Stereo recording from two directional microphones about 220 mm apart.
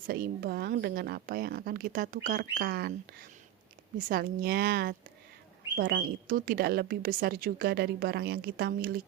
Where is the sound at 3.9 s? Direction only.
40° right (ahead or behind).